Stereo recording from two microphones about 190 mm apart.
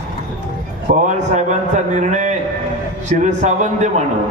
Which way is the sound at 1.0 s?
40° right (ahead or behind).